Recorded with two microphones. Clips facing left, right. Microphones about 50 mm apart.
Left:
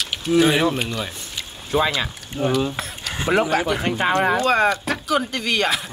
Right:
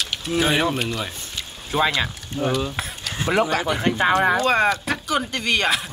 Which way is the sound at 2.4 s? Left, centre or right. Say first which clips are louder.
Left 2 dB; centre.